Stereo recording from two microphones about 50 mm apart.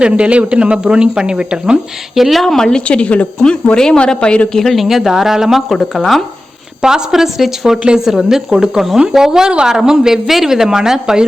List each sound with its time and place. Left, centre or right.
0.0 s speech: right
2.1 s speech: centre
2.4 s a woman's voice: centre
4.5 s speech: centre
6.8 s speech: centre